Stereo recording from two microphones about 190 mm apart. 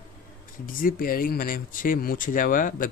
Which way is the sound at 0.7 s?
50° left (ahead or behind).